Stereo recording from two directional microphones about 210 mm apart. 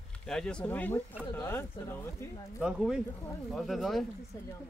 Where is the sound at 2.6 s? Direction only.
5° right (ahead or behind).